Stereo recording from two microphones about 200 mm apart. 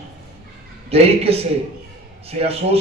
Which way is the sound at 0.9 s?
30° right (ahead or behind).